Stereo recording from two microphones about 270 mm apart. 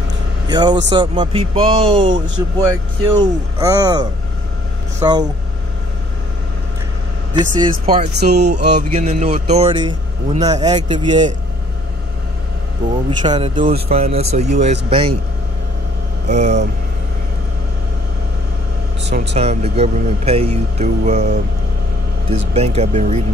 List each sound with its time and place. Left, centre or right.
0.5 s a man's voice: centre
7.3 s a man's voice: centre
7.7 s speech: right
9.0 s a man's voice: right
12.8 s a man's voice: centre
13.7 s speech: right
16.3 s speech: right
19.0 s speech: right
19.3 s speech: right
22.5 s speech: right